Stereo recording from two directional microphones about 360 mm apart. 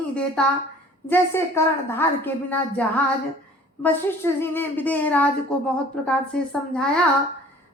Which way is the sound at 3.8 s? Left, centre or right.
Centre.